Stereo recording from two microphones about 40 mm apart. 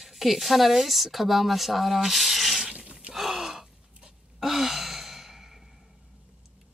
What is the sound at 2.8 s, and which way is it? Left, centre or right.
Gasp, right.